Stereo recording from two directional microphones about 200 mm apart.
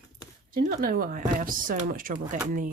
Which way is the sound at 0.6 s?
45° right (ahead or behind).